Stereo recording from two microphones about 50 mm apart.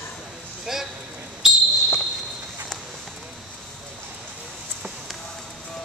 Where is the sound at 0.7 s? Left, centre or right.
Centre.